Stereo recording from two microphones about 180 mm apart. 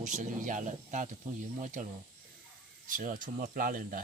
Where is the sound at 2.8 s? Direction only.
50° right (ahead or behind).